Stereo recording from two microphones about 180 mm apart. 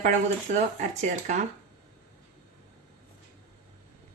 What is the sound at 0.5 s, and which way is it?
Speech, 45° right (ahead or behind).